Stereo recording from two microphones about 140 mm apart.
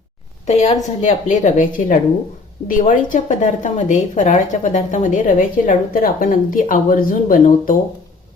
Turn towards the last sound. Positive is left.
turn(degrees=75)  # may be behind; listen again after turning